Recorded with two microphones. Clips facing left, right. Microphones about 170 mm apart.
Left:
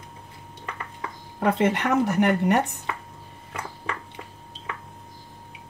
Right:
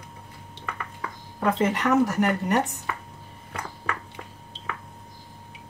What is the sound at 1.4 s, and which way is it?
A woman's voice, 65° left (ahead or behind).